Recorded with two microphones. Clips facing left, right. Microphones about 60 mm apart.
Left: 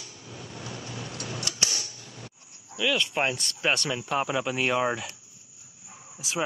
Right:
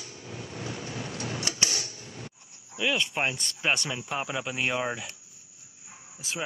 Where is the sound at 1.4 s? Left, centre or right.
Right.